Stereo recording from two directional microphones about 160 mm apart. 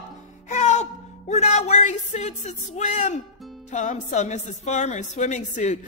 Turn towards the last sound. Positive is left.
turn(degrees=50)  # may be behind; listen again after turning